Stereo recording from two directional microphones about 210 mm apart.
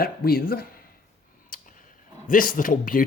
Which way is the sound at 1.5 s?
40° left (ahead or behind).